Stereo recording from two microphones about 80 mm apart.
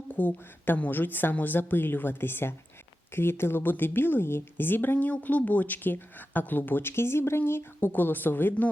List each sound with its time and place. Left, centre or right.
0.1 s a woman's voice: left